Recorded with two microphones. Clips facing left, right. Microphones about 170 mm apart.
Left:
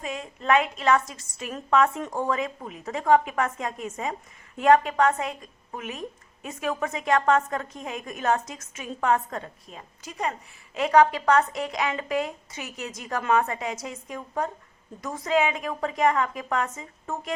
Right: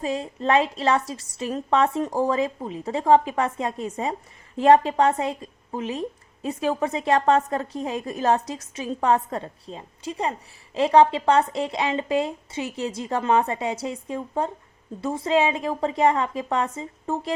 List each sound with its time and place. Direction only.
0.0 s a woman's voice: 30° right (ahead or behind)